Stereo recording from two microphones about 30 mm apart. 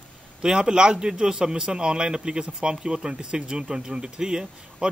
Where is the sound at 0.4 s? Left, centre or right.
Right.